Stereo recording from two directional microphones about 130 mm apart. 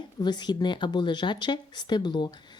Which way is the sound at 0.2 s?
35° left (ahead or behind).